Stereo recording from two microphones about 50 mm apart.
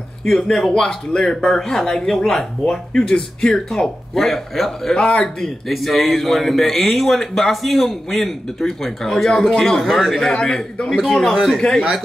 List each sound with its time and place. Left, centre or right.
0.2 s speech: centre
4.9 s speech: left
5.8 s speech: centre